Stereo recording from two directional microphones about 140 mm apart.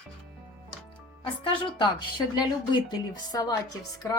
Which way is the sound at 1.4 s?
40° left (ahead or behind).